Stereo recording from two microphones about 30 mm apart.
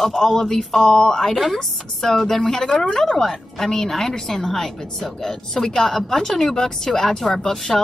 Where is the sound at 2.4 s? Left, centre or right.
Left.